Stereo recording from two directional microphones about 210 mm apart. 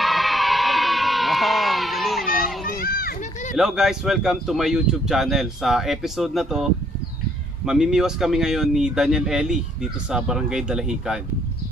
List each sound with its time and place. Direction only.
0.0 s crowd: centre (ahead or behind)
2.8 s children playing: 45° left (ahead or behind)
3.5 s speech: centre (ahead or behind)